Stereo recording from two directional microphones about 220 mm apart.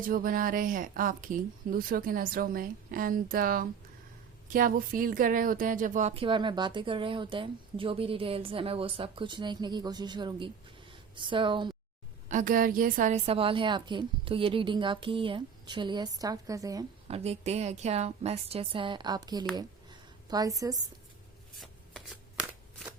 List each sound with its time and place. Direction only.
0.1 s speech: 40° right (ahead or behind); by 11.7 s 20° right (ahead or behind)
12.3 s speech: 35° right (ahead or behind); by 16.8 s 15° right (ahead or behind)
17.1 s speech: 30° right (ahead or behind)
19.5 s a sound: 20° right (ahead or behind)
21.6 s shuffling cards: centre (ahead or behind)